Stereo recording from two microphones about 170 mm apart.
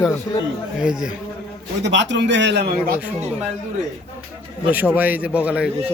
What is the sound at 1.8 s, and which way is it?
Speech, 90° right.